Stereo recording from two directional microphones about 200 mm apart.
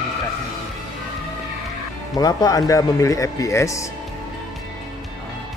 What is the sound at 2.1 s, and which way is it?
Speech, 20° left (ahead or behind).